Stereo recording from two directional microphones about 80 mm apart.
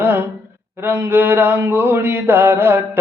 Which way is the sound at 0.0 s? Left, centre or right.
Right.